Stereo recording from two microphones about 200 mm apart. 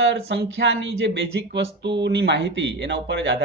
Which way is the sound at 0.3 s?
60° right (ahead or behind).